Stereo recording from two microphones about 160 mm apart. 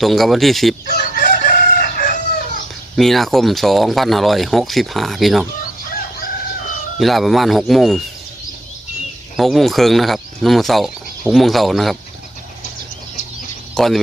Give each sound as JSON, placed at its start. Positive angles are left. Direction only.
{"t": 0.0, "sound": "speech", "side_deg": 0}
{"t": 0.9, "sound": "chicken", "side_deg": 80}
{"t": 2.9, "sound": "speech", "side_deg": 0}
{"t": 5.9, "sound": "crowing", "side_deg": 65}
{"t": 7.0, "sound": "speech", "side_deg": 0}
{"t": 9.4, "sound": "speech", "side_deg": 0}
{"t": 13.7, "sound": "speech", "side_deg": 0}